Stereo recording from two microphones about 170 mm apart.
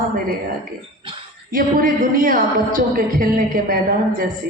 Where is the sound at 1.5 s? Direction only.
55° right (ahead or behind).